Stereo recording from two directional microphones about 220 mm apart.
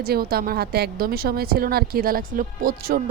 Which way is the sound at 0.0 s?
45° right (ahead or behind).